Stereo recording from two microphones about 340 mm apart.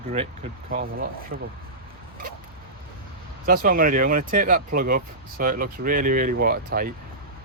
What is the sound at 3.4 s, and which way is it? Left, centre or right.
Speech, right.